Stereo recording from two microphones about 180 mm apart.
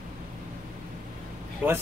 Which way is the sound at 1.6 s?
10° right (ahead or behind).